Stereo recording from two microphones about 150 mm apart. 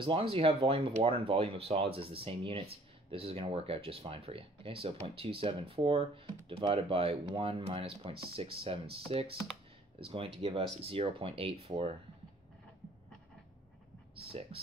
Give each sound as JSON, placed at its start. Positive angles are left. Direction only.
{"t": 0.0, "sound": "speech", "side_deg": -35}
{"t": 14.5, "sound": "speech", "side_deg": -40}